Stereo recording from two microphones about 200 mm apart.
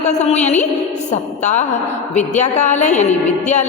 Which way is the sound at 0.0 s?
35° left (ahead or behind).